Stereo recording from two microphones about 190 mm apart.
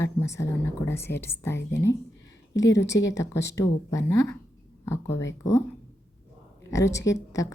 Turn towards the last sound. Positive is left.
turn(degrees=15)  # may be behind; listen again after turning